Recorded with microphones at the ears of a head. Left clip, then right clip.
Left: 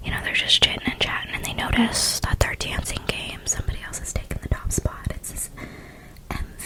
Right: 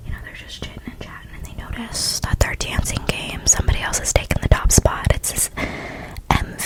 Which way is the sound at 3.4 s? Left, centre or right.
Right.